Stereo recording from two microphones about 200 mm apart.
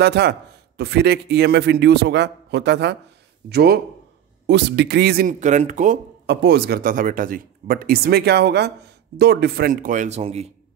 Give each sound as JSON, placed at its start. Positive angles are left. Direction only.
{"t": 0.0, "sound": "a man's voice", "side_deg": -55}
{"t": 5.4, "sound": "speech", "side_deg": -35}
{"t": 6.2, "sound": "speech", "side_deg": -55}